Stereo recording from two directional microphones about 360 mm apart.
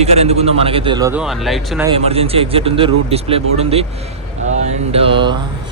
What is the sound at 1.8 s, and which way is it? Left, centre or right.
Speech, centre.